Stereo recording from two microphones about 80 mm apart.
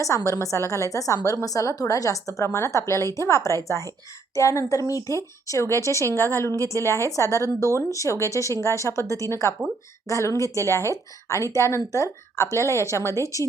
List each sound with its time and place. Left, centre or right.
0.3 s speech: left